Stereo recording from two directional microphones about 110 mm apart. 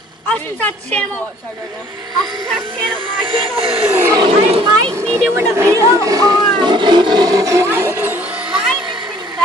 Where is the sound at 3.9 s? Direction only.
20° right (ahead or behind).